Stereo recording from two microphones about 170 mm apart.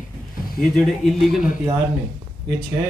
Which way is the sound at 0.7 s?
Centre (ahead or behind).